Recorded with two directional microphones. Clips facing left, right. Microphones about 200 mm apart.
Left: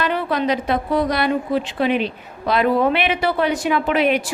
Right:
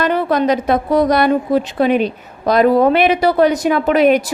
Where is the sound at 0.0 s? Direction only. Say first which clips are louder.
Right 5 dB; 45° right (ahead or behind).